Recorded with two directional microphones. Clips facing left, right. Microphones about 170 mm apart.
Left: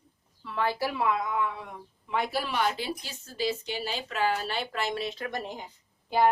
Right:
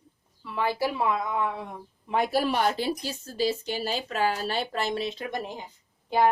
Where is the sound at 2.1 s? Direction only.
45° right (ahead or behind); by 5.2 s 25° right (ahead or behind).